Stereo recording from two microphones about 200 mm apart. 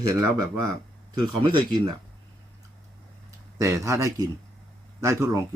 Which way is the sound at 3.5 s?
15° right (ahead or behind).